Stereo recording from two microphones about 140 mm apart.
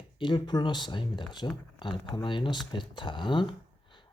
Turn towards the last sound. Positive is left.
turn(degrees=35)  # may be behind; listen again after turning